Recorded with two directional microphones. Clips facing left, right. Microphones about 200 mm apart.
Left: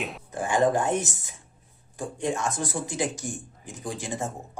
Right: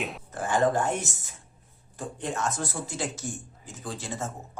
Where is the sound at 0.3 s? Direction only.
15° left (ahead or behind).